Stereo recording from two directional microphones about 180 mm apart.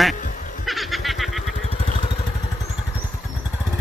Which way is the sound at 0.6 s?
Centre (ahead or behind).